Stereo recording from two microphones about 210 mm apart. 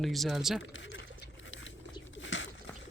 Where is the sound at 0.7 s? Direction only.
60° left (ahead or behind).